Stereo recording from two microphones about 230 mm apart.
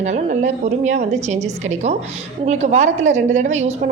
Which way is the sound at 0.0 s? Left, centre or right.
Right.